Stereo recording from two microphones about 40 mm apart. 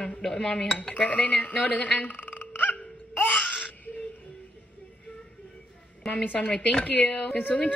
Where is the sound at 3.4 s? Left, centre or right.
Left.